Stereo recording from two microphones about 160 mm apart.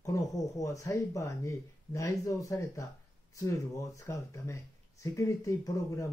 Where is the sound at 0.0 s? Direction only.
20° left (ahead or behind).